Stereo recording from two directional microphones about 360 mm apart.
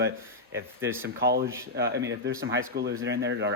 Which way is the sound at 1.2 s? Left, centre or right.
Right.